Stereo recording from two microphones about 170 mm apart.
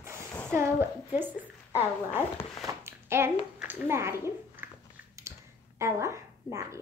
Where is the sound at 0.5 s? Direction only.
15° right (ahead or behind).